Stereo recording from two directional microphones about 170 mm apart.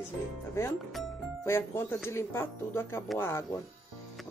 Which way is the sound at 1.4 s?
15° left (ahead or behind).